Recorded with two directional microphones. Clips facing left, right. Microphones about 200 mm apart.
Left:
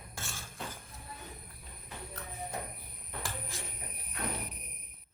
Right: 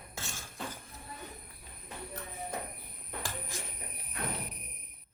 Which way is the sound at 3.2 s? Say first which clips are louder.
Right 1 dB; 15° right (ahead or behind).